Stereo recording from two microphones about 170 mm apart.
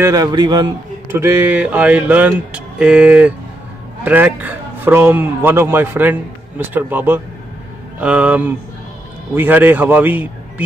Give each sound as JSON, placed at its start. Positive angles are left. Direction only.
{"t": 0.0, "sound": "a man's voice", "side_deg": -20}
{"t": 1.1, "sound": "speech", "side_deg": -15}